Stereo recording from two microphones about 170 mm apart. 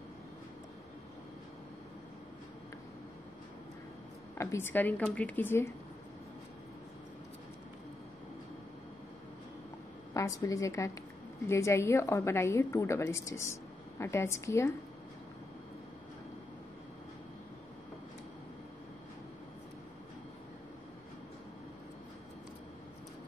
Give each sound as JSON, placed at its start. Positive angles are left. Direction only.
{"t": 4.4, "sound": "a woman's voice", "side_deg": 15}
{"t": 10.1, "sound": "a woman's voice", "side_deg": 20}